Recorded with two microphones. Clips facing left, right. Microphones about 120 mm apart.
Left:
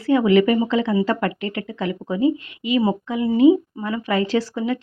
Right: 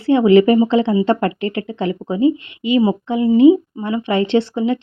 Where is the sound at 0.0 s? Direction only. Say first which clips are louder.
Right 5 dB; 30° right (ahead or behind).